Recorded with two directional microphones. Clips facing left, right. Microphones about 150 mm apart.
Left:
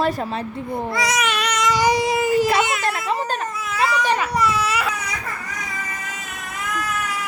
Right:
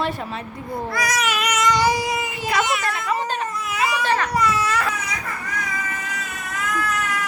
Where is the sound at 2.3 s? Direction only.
40° left (ahead or behind).